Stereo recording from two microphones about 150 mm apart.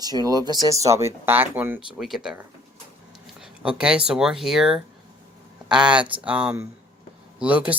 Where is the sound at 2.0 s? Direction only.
Centre (ahead or behind).